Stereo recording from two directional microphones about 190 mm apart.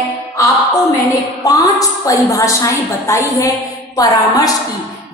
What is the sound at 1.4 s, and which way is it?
A woman's voice, 20° left (ahead or behind).